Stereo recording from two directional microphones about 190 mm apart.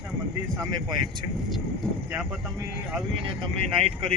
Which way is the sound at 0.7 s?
20° right (ahead or behind).